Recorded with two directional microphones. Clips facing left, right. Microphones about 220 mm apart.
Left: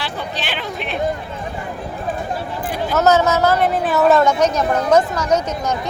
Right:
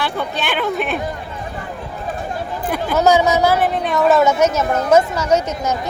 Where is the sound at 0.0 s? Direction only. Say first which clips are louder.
Right 4 dB; 55° right (ahead or behind).